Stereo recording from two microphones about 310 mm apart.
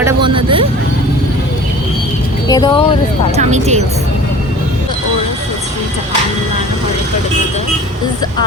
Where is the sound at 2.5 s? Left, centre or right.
Centre.